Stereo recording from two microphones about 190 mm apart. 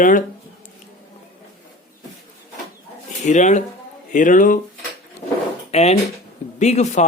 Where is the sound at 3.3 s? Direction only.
40° left (ahead or behind).